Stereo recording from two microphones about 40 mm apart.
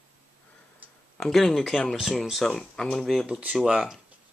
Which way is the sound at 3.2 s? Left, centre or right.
Right.